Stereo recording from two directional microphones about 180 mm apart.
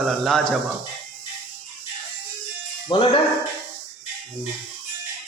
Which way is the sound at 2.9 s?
25° left (ahead or behind).